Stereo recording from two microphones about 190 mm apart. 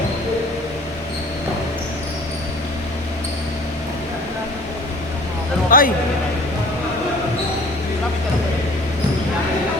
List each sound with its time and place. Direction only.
5.7 s music: 50° left (ahead or behind)